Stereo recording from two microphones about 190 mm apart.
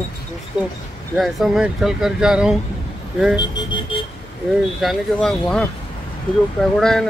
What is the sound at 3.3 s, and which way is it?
Speech, 20° left (ahead or behind).